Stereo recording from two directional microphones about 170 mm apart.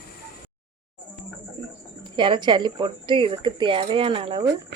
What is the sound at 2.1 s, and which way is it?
Speech, 30° right (ahead or behind).